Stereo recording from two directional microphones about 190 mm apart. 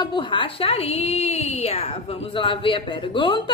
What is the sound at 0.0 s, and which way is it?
A woman's voice, 25° left (ahead or behind).